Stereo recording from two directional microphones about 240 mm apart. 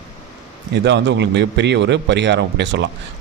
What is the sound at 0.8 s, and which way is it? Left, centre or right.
Speech, right.